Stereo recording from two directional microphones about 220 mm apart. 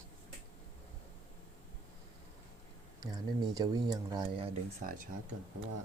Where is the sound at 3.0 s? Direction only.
15° right (ahead or behind).